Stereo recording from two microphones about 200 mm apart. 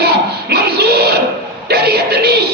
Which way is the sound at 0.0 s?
55° right (ahead or behind).